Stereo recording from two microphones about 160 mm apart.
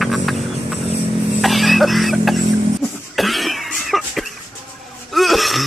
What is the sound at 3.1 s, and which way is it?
Cough, centre (ahead or behind).